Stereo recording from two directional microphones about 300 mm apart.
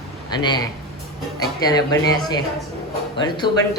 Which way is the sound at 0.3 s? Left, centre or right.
Centre.